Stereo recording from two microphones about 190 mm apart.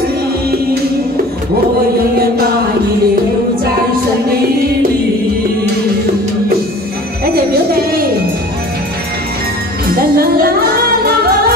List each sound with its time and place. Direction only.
7.3 s music: 55° right (ahead or behind)
9.9 s music: 50° right (ahead or behind)